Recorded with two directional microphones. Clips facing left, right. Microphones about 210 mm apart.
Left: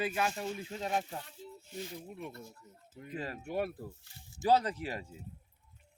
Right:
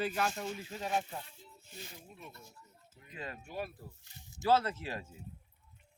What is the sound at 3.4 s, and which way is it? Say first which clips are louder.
Speech: left 7 dB; 60° left (ahead or behind).